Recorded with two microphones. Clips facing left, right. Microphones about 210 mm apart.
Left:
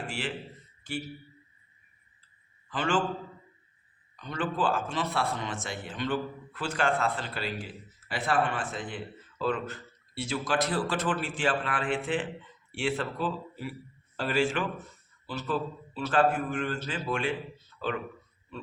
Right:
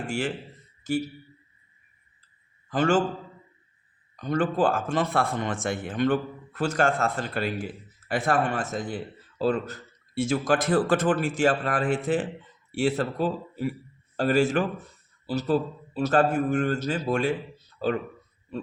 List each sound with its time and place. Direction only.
0.1 s a man's voice: 45° right (ahead or behind)
2.6 s a man's voice: 45° right (ahead or behind)
4.2 s a man's voice: 45° right (ahead or behind)
18.5 s oink: 40° right (ahead or behind)